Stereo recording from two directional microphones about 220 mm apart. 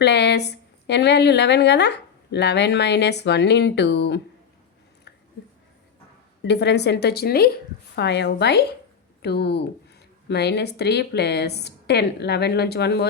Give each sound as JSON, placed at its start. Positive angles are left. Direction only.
{"t": 0.0, "sound": "a woman's voice", "side_deg": 50}
{"t": 6.4, "sound": "a woman's voice", "side_deg": 50}